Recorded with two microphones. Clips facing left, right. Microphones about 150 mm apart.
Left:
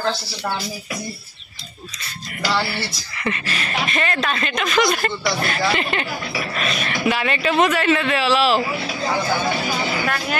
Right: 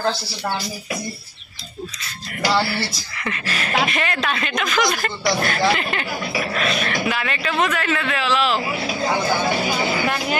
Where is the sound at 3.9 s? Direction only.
10° right (ahead or behind); by 7.3 s 10° left (ahead or behind).